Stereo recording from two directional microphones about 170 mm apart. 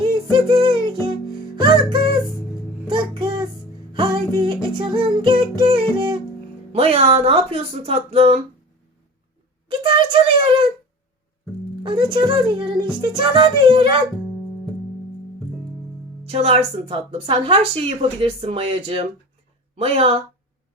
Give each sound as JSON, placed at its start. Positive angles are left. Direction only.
{"t": 0.0, "sound": "music", "side_deg": -25}
{"t": 6.7, "sound": "a woman's voice", "side_deg": -35}
{"t": 9.6, "sound": "a sound", "side_deg": -30}
{"t": 11.8, "sound": "speech", "side_deg": -30}
{"t": 16.2, "sound": "a woman's voice", "side_deg": -35}